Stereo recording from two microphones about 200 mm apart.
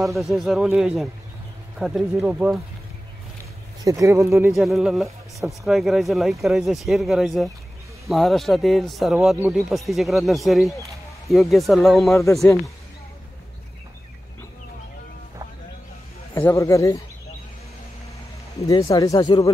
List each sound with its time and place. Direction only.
0.0 s speech: centre (ahead or behind)
3.8 s speech: 15° right (ahead or behind)
4.5 s speech: centre (ahead or behind)
16.3 s speech: 15° left (ahead or behind)
18.6 s speech: 15° left (ahead or behind)